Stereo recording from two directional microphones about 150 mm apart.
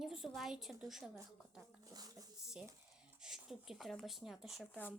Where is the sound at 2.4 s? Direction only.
5° right (ahead or behind).